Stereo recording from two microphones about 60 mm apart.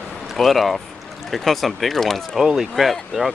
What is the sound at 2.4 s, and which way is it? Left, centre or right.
Speech, centre.